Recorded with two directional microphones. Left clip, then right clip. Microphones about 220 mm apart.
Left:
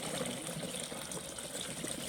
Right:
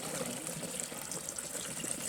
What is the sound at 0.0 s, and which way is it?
Water, 15° right (ahead or behind).